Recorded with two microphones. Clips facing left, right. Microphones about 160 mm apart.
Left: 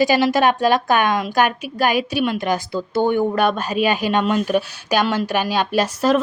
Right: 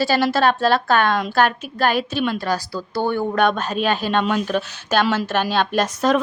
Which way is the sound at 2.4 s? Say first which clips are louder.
Left 2 dB; 20° left (ahead or behind).